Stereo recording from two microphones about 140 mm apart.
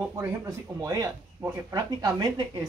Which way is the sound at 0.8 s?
20° right (ahead or behind).